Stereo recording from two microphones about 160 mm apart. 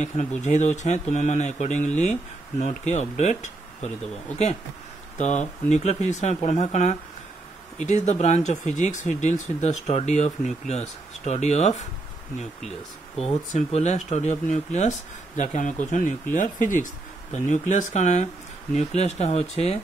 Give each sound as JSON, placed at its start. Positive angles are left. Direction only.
{"t": 0.0, "sound": "speech", "side_deg": 45}
{"t": 5.2, "sound": "speech", "side_deg": 45}
{"t": 13.2, "sound": "speech", "side_deg": 45}